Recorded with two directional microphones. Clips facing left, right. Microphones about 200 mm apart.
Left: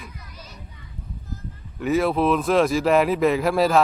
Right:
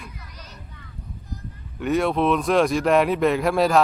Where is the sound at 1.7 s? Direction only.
Centre (ahead or behind).